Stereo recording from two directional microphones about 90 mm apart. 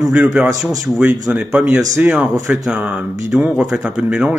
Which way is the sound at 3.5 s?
5° right (ahead or behind).